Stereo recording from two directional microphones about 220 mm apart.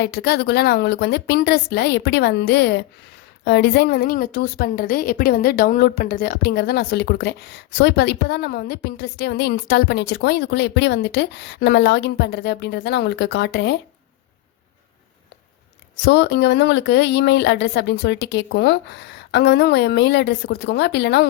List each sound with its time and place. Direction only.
0.0 s a woman's voice: 45° left (ahead or behind)
16.0 s a woman's voice: 50° left (ahead or behind)